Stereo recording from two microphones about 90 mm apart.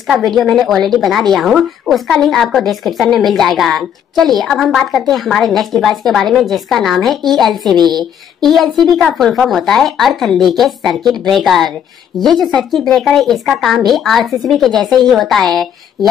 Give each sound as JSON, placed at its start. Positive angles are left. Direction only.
{"t": 0.0, "sound": "a woman's voice", "side_deg": 0}